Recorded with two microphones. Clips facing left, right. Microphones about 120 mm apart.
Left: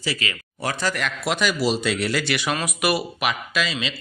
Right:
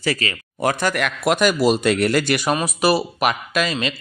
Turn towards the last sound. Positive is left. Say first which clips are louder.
# right 4 dB
turn(degrees=-50)  # may be behind; listen again after turning